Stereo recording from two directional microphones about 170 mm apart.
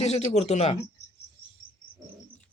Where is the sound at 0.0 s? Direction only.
40° left (ahead or behind).